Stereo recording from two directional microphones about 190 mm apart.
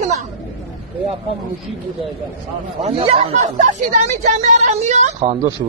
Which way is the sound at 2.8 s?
30° right (ahead or behind).